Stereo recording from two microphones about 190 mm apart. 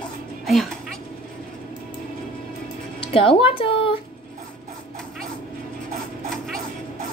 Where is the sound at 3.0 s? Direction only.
30° left (ahead or behind).